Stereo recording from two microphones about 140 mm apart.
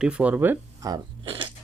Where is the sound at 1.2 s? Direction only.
40° right (ahead or behind).